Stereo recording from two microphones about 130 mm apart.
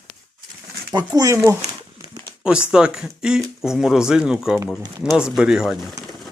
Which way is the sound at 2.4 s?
5° right (ahead or behind).